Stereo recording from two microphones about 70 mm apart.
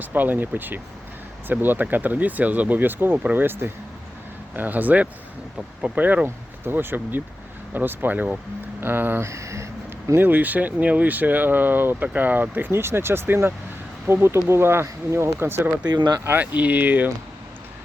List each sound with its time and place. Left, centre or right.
0.0 s speech: right
9.2 s speech: right
10.2 s speech: right
15.9 s speech: right
16.2 s speech: right